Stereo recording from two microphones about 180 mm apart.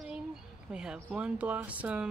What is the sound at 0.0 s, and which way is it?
Speech, 5° right (ahead or behind).